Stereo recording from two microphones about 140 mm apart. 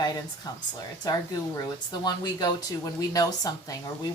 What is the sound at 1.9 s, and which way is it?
Speech, 30° left (ahead or behind).